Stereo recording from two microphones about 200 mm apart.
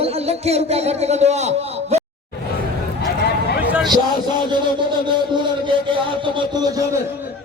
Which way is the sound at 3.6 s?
10° right (ahead or behind).